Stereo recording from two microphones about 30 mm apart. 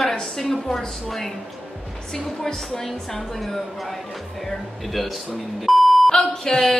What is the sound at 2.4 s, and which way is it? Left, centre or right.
Speech, centre.